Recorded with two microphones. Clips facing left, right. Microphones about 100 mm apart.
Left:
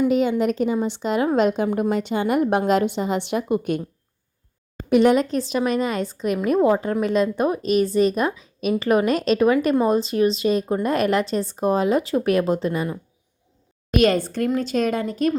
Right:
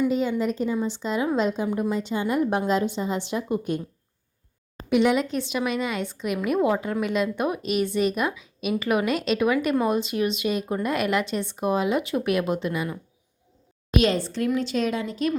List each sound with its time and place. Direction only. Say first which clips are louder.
0.1 s a woman's voice: left 5 dB; 70° left (ahead or behind)
4.9 s speech: left 5 dB; 45° left (ahead or behind)
13.9 s speech: left 4 dB; 50° left (ahead or behind)